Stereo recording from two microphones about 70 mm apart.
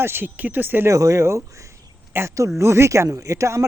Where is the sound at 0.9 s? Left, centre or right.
Right.